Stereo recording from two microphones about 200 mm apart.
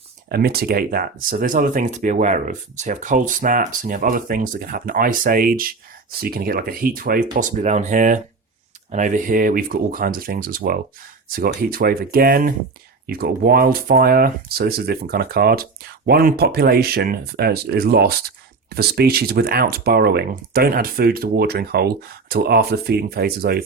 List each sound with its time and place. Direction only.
0.3 s speech: 50° right (ahead or behind)